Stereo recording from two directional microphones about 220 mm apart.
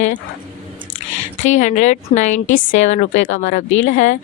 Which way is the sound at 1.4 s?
35° left (ahead or behind).